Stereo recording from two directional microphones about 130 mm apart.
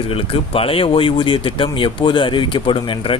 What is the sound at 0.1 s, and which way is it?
A man's voice, 45° left (ahead or behind).